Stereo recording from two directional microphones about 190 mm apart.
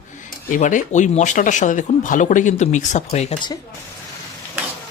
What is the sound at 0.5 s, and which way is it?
Speech, 45° left (ahead or behind).